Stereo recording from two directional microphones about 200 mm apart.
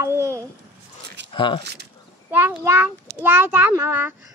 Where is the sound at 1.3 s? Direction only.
25° left (ahead or behind).